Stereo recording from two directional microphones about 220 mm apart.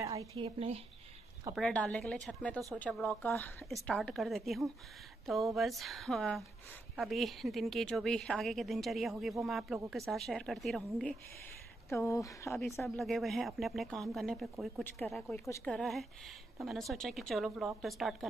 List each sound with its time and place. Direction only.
0.0 s a sound: 15° right (ahead or behind)
0.4 s speech: 25° right (ahead or behind)
1.5 s speech: 5° left (ahead or behind)
11.9 s speech: 10° left (ahead or behind)
12.8 s speech: centre (ahead or behind)